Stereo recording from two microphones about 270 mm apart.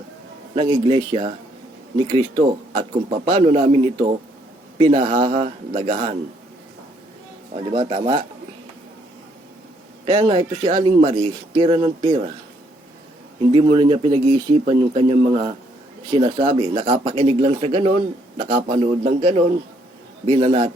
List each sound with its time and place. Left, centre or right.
0.5 s speech: centre
7.6 s speech: centre
10.1 s speech: right
13.5 s speech: centre